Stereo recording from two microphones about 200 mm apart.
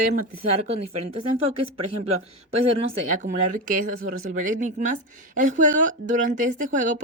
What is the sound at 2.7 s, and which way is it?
Speech, 35° right (ahead or behind).